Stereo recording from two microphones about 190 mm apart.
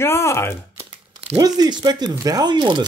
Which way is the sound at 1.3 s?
20° right (ahead or behind).